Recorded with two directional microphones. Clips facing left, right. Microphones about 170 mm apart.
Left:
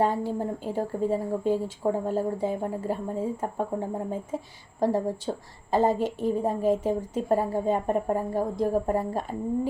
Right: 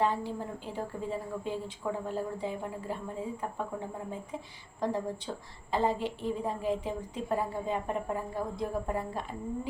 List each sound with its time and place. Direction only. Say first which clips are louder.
0.0 s a woman's voice: left 5 dB; 45° left (ahead or behind)